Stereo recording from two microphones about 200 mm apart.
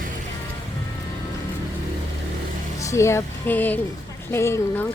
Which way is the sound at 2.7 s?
15° left (ahead or behind).